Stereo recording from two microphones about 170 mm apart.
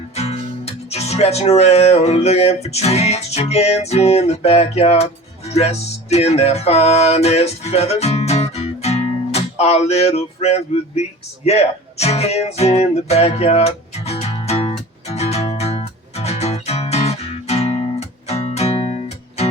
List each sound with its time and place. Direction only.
0.1 s speech: 40° left (ahead or behind)
3.5 s music: 40° left (ahead or behind)